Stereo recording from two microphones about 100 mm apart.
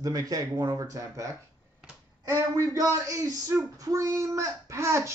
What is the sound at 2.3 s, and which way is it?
Speech, 30° right (ahead or behind).